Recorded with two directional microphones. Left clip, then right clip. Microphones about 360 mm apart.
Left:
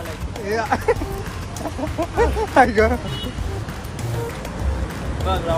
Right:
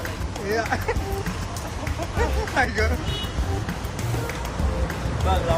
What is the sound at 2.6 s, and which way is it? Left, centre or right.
Speech, centre.